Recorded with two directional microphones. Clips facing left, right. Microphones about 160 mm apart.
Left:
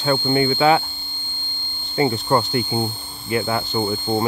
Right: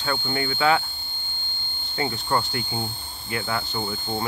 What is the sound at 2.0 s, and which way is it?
Speech, 20° left (ahead or behind).